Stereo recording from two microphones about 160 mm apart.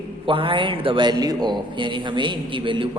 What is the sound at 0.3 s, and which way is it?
A man's voice, 35° right (ahead or behind).